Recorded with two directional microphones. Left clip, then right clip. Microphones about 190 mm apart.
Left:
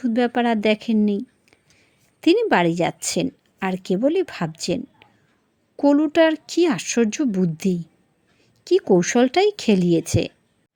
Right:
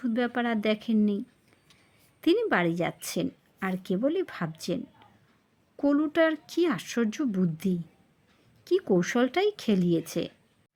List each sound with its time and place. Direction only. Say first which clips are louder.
0.0 s a woman's voice: left 8 dB; 25° left (ahead or behind)
1.0 s a sound: left 7 dB; 25° left (ahead or behind)
2.2 s a woman's voice: left 8 dB; 25° left (ahead or behind)